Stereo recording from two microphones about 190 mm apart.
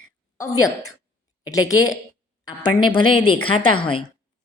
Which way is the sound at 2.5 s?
25° left (ahead or behind).